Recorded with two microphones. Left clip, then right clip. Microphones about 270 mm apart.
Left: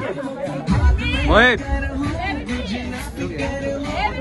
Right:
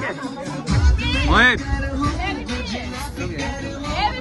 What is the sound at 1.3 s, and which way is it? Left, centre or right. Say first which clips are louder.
Speech: left 1 dB; centre.